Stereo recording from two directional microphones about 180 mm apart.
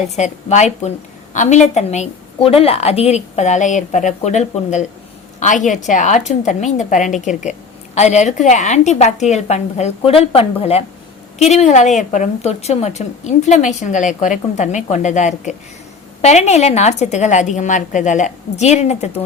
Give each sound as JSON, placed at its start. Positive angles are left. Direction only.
{"t": 0.2, "sound": "a woman's voice", "side_deg": 40}